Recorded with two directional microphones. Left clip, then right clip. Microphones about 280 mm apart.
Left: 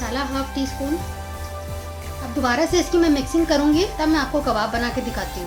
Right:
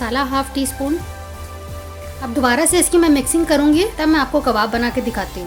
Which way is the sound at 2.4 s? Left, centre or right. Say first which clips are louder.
Right 4 dB; right.